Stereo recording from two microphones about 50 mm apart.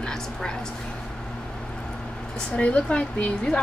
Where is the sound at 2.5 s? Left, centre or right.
Left.